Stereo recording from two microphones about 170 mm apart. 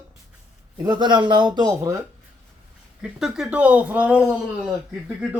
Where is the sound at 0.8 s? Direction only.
25° right (ahead or behind).